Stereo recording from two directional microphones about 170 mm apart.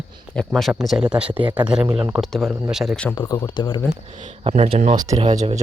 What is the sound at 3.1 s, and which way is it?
Speech, 20° left (ahead or behind).